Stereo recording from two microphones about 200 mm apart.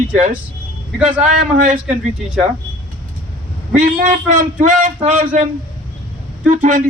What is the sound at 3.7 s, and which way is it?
A man's voice, 40° right (ahead or behind).